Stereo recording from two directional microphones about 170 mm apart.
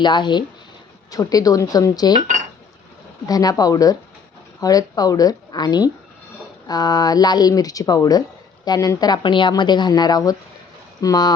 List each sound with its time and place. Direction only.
0.0 s a woman's voice: 25° left (ahead or behind)
3.2 s a woman's voice: 20° left (ahead or behind)